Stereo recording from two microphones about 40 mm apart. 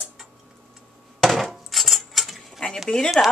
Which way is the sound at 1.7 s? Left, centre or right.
Centre.